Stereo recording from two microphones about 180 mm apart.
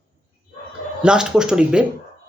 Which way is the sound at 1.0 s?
5° right (ahead or behind).